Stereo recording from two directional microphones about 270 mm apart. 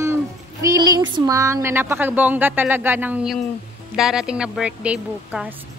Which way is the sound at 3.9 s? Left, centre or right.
Centre.